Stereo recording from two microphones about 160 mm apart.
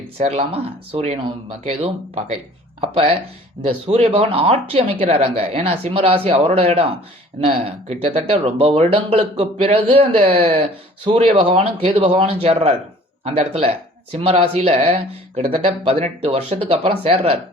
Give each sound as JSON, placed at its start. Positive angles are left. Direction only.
{"t": 0.3, "sound": "speech", "side_deg": -35}